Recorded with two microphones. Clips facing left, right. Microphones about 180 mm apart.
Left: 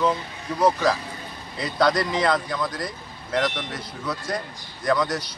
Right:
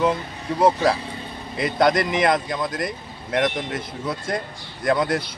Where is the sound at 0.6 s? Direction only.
25° right (ahead or behind).